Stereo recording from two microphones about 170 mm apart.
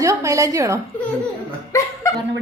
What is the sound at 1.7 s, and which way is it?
Speech, 20° left (ahead or behind).